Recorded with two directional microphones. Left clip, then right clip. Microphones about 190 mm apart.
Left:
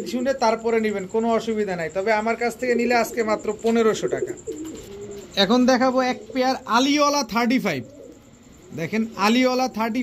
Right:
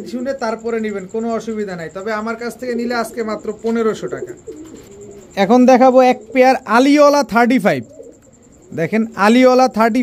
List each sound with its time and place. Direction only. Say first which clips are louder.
0.0 s a man's voice: even; 45° right (ahead or behind)
5.3 s a man's voice: right 8 dB; 65° right (ahead or behind)